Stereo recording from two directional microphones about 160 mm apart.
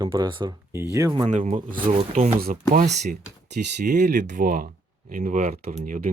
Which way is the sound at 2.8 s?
50° right (ahead or behind).